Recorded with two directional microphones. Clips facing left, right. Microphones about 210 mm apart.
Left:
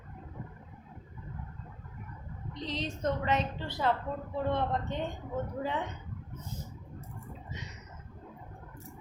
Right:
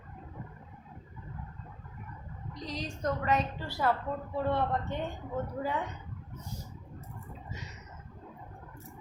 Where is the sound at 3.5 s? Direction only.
20° left (ahead or behind).